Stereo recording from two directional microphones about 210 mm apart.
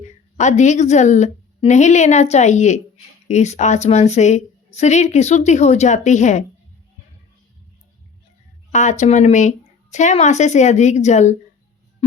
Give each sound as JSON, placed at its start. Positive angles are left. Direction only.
{"t": 0.0, "sound": "a woman's voice", "side_deg": 35}
{"t": 8.7, "sound": "a woman's voice", "side_deg": 35}